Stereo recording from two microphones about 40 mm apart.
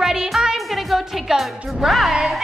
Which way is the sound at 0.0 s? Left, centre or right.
Centre.